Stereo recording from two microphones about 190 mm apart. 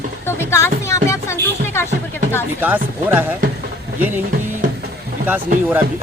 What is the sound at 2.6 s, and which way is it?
Speech, 10° right (ahead or behind).